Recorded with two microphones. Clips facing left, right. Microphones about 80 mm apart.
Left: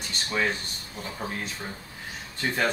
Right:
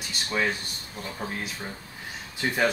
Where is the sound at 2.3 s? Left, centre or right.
Centre.